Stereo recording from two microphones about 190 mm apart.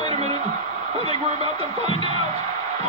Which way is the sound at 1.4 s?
30° right (ahead or behind).